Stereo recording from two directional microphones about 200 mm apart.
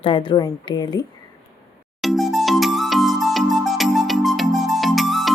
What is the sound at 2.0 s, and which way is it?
Music, centre (ahead or behind).